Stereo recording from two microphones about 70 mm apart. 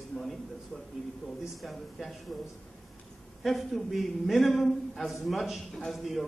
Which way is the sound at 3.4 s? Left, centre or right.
Centre.